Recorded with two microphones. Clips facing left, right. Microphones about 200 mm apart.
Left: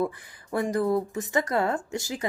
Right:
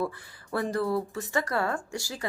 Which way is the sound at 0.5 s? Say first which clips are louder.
Left 3 dB; 15° left (ahead or behind).